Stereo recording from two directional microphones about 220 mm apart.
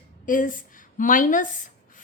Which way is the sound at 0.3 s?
35° left (ahead or behind).